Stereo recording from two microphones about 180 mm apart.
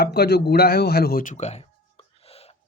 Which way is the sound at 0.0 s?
60° left (ahead or behind).